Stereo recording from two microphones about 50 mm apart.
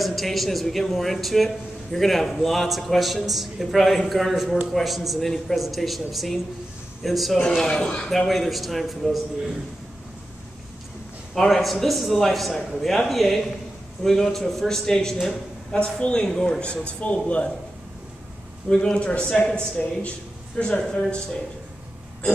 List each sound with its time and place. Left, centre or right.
0.0 s speech: centre
7.4 s a man's voice: centre
8.3 s speech: centre
11.3 s a man's voice: centre
15.8 s speech: left
18.7 s a man's voice: centre